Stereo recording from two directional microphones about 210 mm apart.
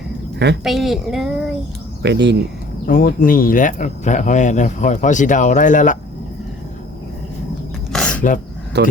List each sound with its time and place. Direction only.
0.6 s a woman's voice: centre (ahead or behind)
2.0 s speech: 55° right (ahead or behind)
2.8 s speech: 45° left (ahead or behind)
7.9 s a sound: 5° left (ahead or behind)
8.7 s speech: 55° right (ahead or behind)